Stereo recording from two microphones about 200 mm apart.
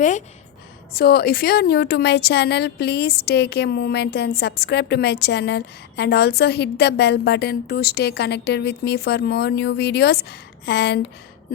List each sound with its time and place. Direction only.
0.9 s a woman's voice: 50° left (ahead or behind)